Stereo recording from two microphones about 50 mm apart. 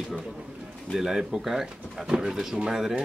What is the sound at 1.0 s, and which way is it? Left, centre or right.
Speech, centre.